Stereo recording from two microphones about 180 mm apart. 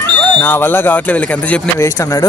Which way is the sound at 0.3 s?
10° left (ahead or behind).